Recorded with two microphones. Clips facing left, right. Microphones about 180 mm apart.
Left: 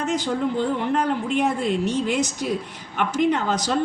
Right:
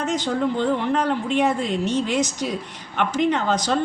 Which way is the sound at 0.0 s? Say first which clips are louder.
Right 1 dB; 5° left (ahead or behind).